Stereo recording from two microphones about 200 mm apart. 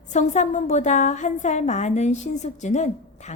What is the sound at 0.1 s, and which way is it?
A woman's voice, 35° left (ahead or behind).